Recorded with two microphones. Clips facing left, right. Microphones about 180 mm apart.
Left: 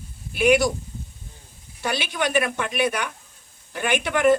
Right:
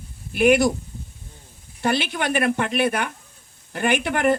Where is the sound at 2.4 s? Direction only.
45° right (ahead or behind).